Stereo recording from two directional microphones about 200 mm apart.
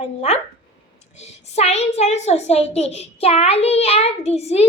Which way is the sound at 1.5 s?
30° left (ahead or behind).